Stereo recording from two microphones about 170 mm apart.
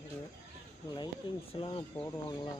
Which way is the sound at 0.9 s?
25° left (ahead or behind).